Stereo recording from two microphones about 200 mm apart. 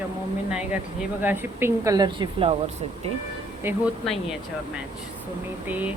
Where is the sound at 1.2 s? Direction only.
10° right (ahead or behind); by 2.6 s 25° right (ahead or behind).